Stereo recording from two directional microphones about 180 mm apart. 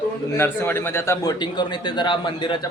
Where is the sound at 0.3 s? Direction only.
15° left (ahead or behind).